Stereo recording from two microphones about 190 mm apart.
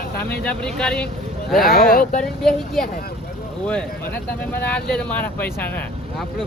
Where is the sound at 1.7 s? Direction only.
50° left (ahead or behind).